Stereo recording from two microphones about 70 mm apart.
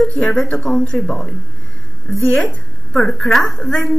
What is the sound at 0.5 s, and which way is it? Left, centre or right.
Speech, centre.